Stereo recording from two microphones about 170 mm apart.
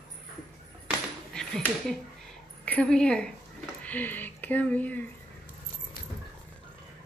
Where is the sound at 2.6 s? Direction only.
5° left (ahead or behind).